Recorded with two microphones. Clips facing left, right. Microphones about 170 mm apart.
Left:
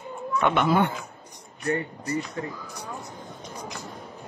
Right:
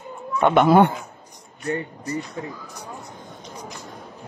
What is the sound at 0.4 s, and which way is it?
Speech, 45° right (ahead or behind).